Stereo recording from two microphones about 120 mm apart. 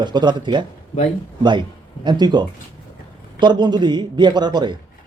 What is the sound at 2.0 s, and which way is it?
A man's voice, 40° right (ahead or behind).